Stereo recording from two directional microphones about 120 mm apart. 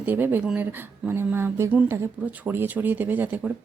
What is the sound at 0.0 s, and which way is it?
Speech, 15° right (ahead or behind).